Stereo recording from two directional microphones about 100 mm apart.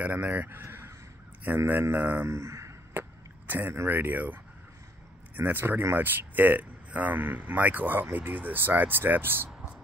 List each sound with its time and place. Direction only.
0.0 s speech: 15° right (ahead or behind)
2.2 s speech: 30° right (ahead or behind)